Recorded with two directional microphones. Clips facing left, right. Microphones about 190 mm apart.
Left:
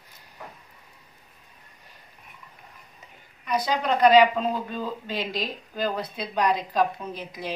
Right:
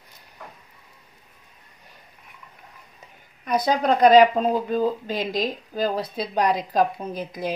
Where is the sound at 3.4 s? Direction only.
45° right (ahead or behind).